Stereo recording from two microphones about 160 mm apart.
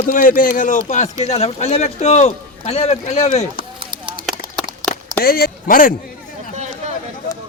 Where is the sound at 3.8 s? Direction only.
30° right (ahead or behind).